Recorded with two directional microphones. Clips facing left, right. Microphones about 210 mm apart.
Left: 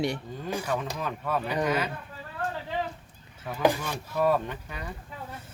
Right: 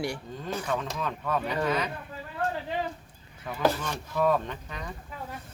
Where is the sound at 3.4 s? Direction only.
15° left (ahead or behind).